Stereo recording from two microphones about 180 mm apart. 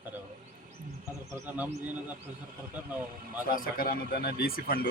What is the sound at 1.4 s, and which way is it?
Speech, 10° right (ahead or behind).